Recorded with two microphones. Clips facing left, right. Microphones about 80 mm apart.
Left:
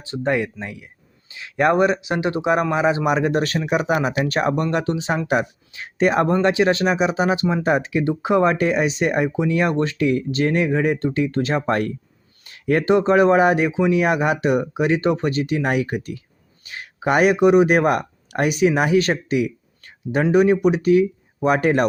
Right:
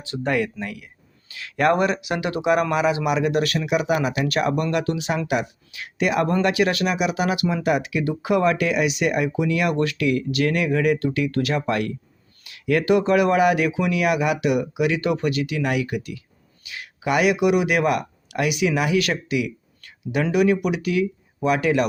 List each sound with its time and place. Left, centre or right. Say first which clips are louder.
0.0 s speech: left 2 dB; left